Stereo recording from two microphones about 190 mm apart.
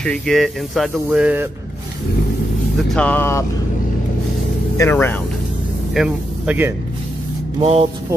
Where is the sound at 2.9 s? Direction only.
10° left (ahead or behind).